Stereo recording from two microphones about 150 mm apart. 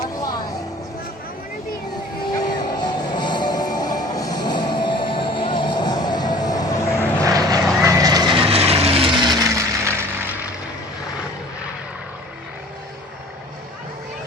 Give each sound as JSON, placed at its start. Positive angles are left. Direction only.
{"t": 0.2, "sound": "vehicle", "side_deg": 25}
{"t": 2.2, "sound": "music", "side_deg": 30}
{"t": 7.2, "sound": "vehicle", "side_deg": -25}